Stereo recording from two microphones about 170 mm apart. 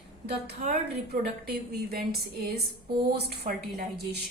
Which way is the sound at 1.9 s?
65° right (ahead or behind).